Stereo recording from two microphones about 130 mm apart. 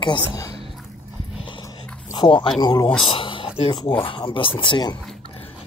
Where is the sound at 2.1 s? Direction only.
40° left (ahead or behind).